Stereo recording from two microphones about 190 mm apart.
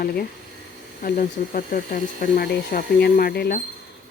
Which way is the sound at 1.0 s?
45° left (ahead or behind).